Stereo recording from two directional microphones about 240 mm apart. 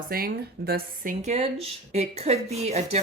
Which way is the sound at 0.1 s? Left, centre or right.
Right.